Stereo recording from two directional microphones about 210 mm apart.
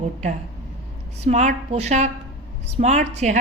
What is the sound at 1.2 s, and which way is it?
A woman's voice, 35° right (ahead or behind).